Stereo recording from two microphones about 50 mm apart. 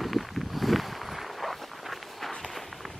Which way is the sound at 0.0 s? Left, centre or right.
Centre.